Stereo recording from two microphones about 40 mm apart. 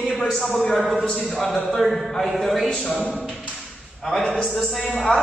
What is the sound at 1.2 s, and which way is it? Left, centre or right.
A man's voice, centre.